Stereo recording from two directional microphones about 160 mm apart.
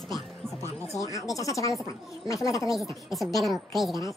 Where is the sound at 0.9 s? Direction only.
20° left (ahead or behind).